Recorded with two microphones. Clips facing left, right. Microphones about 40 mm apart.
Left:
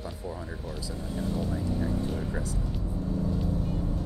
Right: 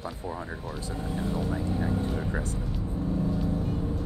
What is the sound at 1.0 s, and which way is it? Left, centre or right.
Speech, right.